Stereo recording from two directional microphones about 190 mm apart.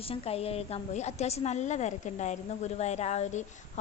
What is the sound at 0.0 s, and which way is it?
A woman's voice, 30° left (ahead or behind).